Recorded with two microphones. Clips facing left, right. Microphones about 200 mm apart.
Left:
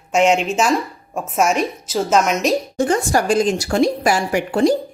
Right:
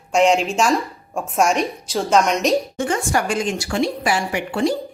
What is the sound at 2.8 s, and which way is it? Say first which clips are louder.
Speech: left 4 dB; 35° left (ahead or behind).